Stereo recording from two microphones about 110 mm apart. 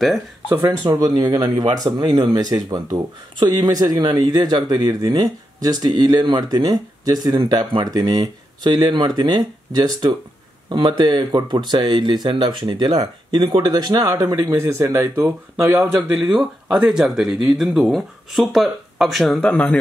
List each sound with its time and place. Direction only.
0.8 s speech: 35° right (ahead or behind)
10.7 s speech: 45° right (ahead or behind); by 15.9 s 25° right (ahead or behind)
16.3 s speech: 5° right (ahead or behind); by 19.8 s 10° left (ahead or behind)